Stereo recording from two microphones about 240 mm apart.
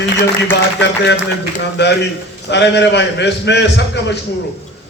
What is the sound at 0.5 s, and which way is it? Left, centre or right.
A man's voice, left.